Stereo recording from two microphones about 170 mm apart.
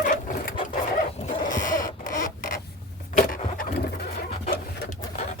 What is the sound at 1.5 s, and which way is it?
Rodents, 50° left (ahead or behind).